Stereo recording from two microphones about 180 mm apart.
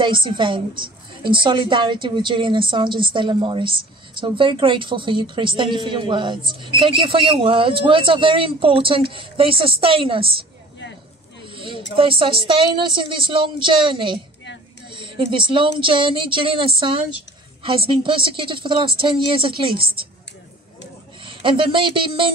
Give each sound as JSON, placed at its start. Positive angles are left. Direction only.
{"t": 0.0, "sound": "a woman's voice", "side_deg": -30}
{"t": 11.4, "sound": "a sound", "side_deg": -30}
{"t": 11.9, "sound": "a woman's voice", "side_deg": -30}
{"t": 21.2, "sound": "a woman's voice", "side_deg": -30}